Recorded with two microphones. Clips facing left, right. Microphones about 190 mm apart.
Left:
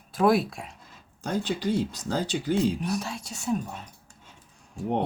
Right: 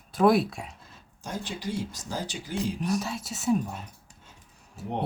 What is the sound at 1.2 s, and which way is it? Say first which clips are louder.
Speech: left 7 dB; 65° left (ahead or behind).